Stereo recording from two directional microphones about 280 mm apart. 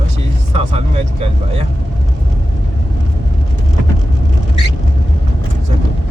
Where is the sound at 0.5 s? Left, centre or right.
Right.